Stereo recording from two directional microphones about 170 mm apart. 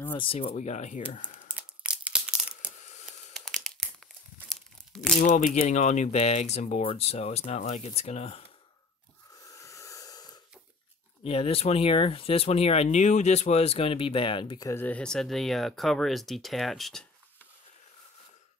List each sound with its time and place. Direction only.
0.2 s speech: 35° left (ahead or behind)
1.5 s tearing: 5° right (ahead or behind)
2.8 s squish: 45° left (ahead or behind)
3.3 s crumpling: centre (ahead or behind)
5.2 s speech: 50° left (ahead or behind)
9.4 s snort: 20° left (ahead or behind)
11.2 s speech: 35° left (ahead or behind)
14.7 s speech: 10° left (ahead or behind)